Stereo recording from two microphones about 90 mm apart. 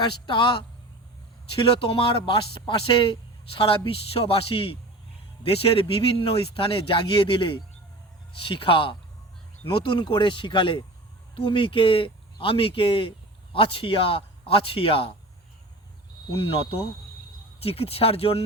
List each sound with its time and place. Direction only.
0.0 s speech: 60° left (ahead or behind)
1.9 s a man's voice: 75° left (ahead or behind); by 15.1 s 90° left
16.3 s a man's voice: 90° left